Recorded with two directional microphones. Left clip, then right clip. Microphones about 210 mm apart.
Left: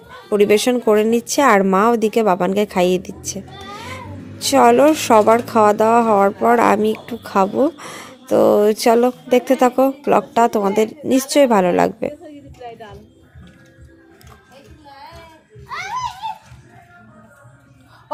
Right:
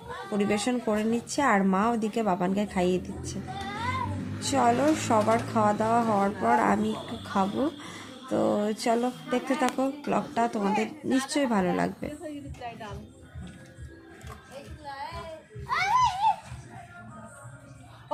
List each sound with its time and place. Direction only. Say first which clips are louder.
0.3 s speech: left 14 dB; 40° left (ahead or behind)
4.4 s speech: left 13 dB; 45° left (ahead or behind)
14.8 s child singing: right 1 dB; 20° right (ahead or behind)